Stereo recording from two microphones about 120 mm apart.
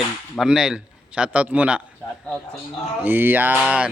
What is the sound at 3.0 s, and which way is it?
Speech, 15° right (ahead or behind).